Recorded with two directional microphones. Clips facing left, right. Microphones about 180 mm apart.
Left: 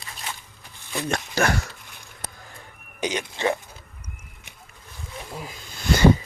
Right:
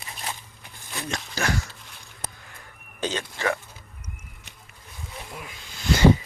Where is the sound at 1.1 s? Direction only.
60° left (ahead or behind).